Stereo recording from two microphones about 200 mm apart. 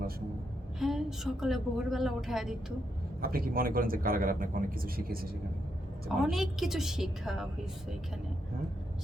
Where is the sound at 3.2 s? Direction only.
45° right (ahead or behind).